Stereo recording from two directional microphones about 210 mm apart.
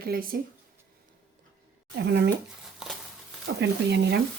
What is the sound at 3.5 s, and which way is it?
Speech, 55° right (ahead or behind).